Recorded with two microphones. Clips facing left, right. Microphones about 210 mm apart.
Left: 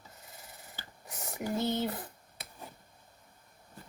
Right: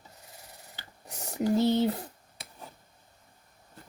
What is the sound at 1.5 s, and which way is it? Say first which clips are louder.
Speech: right 7 dB; 65° right (ahead or behind).